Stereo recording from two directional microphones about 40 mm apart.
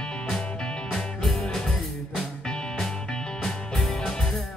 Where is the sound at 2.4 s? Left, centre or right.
Left.